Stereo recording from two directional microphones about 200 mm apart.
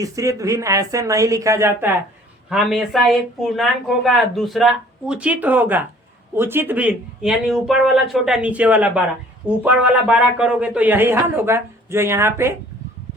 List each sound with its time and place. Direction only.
0.0 s speech: 15° right (ahead or behind)
2.5 s speech: centre (ahead or behind)